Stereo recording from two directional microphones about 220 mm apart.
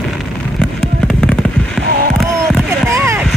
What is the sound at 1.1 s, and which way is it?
Fireworks, 5° left (ahead or behind).